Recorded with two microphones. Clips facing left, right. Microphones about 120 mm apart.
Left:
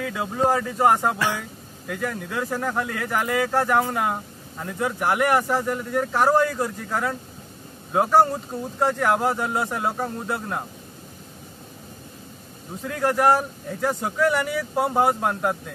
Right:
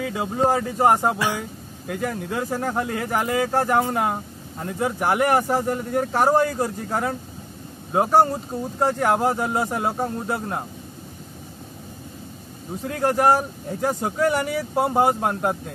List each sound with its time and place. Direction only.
0.5 s speech: 20° right (ahead or behind)
1.9 s speech: 30° right (ahead or behind)
12.8 s speech: 30° right (ahead or behind)
14.9 s speech: 15° right (ahead or behind)